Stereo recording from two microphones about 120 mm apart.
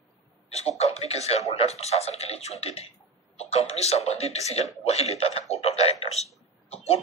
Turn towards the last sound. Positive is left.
turn(degrees=55)  # may be behind; listen again after turning